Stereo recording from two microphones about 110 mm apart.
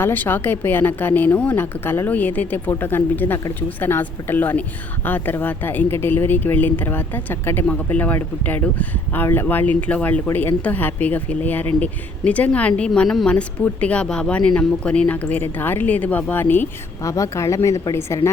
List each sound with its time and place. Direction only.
0.0 s a woman's voice: 20° left (ahead or behind)
17.0 s speech: 30° left (ahead or behind)